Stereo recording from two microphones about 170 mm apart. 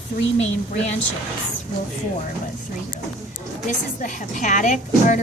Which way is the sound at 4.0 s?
50° left (ahead or behind).